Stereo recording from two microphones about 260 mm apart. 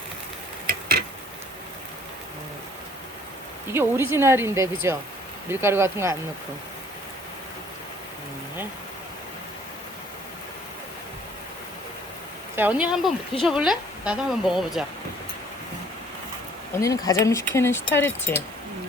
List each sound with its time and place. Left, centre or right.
0.7 s a sound: right
3.7 s speech: centre
12.5 s speech: centre
16.8 s speech: centre